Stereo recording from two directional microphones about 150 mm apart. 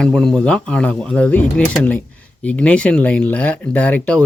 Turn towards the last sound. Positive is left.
turn(degrees=10)  # may be behind; listen again after turning